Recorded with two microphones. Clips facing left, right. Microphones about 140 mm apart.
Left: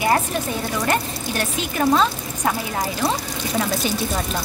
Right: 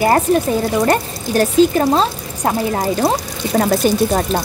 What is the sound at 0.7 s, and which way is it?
Speech, 35° right (ahead or behind).